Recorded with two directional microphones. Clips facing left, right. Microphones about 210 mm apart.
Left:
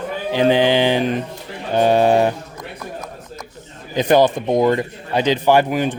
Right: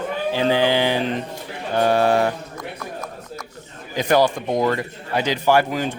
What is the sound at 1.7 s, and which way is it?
Mantra, 20° left (ahead or behind).